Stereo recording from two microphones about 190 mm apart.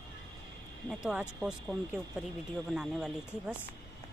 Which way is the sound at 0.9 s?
5° right (ahead or behind).